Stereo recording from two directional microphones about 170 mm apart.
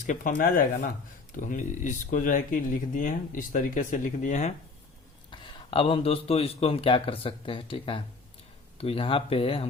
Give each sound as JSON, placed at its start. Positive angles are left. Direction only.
{"t": 0.0, "sound": "speech", "side_deg": 50}
{"t": 5.3, "sound": "a man's voice", "side_deg": 30}